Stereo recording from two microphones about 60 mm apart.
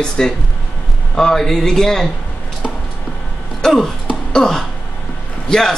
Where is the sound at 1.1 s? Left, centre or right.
Centre.